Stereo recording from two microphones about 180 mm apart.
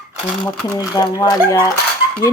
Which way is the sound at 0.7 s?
20° left (ahead or behind).